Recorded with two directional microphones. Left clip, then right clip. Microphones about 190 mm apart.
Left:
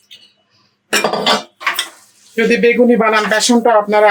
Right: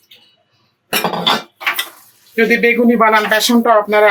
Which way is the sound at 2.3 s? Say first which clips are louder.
Even; 25° left (ahead or behind).